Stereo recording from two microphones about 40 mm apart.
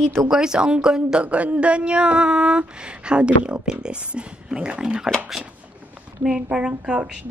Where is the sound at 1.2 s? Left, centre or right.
Right.